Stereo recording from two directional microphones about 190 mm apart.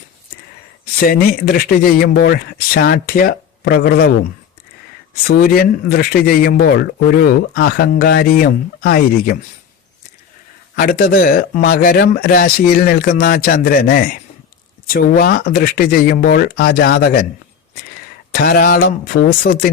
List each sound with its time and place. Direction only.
0.9 s speech: 50° left (ahead or behind)
5.2 s speech: 50° left (ahead or behind)
10.8 s speech: 45° left (ahead or behind)
18.3 s speech: 50° left (ahead or behind)